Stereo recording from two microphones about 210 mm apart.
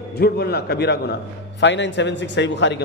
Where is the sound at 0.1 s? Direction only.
50° left (ahead or behind).